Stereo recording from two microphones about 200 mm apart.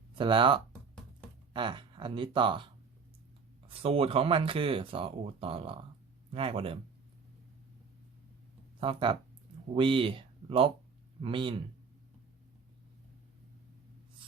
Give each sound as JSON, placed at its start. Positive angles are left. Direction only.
{"t": 0.2, "sound": "speech", "side_deg": -25}
{"t": 3.7, "sound": "speech", "side_deg": -30}
{"t": 8.8, "sound": "speech", "side_deg": -25}